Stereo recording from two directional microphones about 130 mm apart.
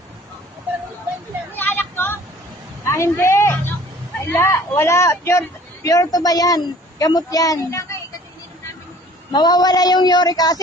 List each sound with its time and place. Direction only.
1.5 s vehicle: 15° left (ahead or behind)
2.8 s a sound: 20° left (ahead or behind)
4.2 s speech: 20° left (ahead or behind)
9.3 s speech: 30° left (ahead or behind)